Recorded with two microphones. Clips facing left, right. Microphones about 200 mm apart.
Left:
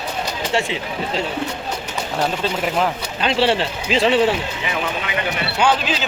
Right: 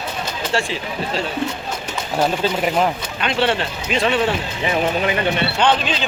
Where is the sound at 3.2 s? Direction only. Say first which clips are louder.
Left 2 dB; 30° left (ahead or behind).